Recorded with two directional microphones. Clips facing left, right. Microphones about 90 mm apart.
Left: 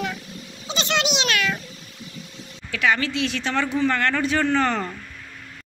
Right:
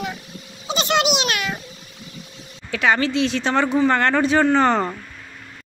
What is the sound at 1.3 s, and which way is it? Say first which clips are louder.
Cat: left 1 dB; 20° right (ahead or behind).